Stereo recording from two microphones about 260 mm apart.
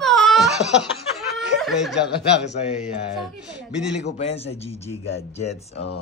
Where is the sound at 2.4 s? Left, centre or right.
Left.